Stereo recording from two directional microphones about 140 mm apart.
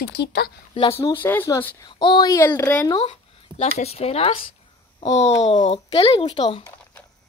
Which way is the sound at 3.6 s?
50° left (ahead or behind).